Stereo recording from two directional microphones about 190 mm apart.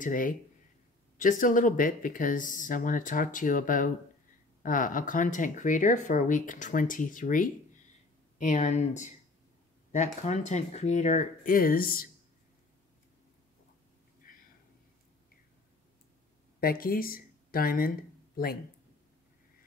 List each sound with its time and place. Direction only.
0.0 s speech: 45° left (ahead or behind)
10.2 s speech: 35° left (ahead or behind)
16.5 s speech: 50° left (ahead or behind)